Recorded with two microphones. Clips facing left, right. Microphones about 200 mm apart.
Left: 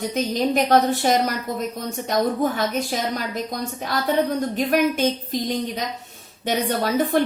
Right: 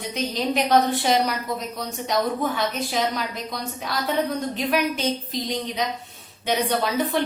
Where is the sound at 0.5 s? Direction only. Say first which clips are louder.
Left 1 dB; 45° left (ahead or behind).